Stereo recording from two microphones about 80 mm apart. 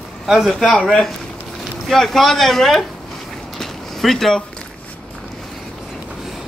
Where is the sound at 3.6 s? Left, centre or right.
Centre.